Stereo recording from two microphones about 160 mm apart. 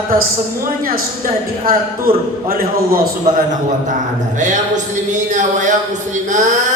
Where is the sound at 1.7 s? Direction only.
65° right (ahead or behind).